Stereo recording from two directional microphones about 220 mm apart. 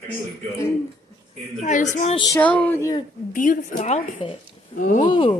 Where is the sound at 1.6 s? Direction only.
35° left (ahead or behind).